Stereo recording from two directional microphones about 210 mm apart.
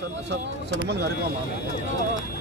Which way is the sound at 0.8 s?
55° right (ahead or behind).